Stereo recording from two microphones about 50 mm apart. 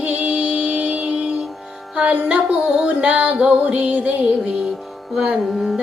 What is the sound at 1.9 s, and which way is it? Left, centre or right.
Music, right.